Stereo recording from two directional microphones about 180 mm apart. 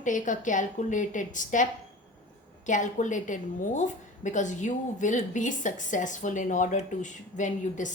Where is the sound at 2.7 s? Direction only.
45° left (ahead or behind).